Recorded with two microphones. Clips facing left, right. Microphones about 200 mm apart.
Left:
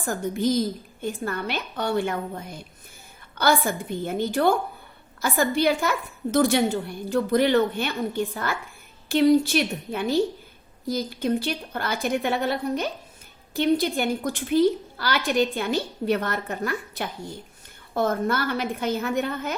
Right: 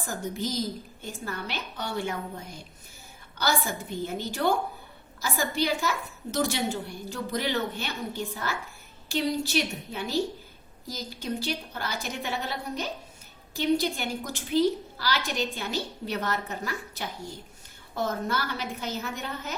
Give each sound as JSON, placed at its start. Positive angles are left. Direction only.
{"t": 0.0, "sound": "a woman's voice", "side_deg": 55}